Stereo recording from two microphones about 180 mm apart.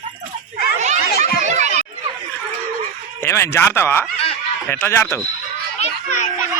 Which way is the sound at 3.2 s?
15° left (ahead or behind).